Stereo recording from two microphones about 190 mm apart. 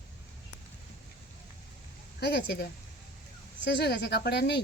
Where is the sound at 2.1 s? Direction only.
60° left (ahead or behind).